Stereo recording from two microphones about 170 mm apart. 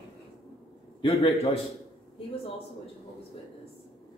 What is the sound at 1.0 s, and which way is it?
Speech, 35° left (ahead or behind).